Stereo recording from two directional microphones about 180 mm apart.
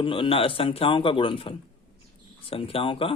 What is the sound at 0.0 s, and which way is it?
A man's voice, 30° left (ahead or behind).